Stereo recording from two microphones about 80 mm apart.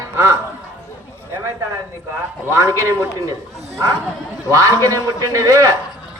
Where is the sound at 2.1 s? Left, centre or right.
Right.